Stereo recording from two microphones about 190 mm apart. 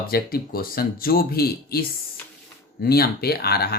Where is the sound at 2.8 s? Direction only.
55° left (ahead or behind).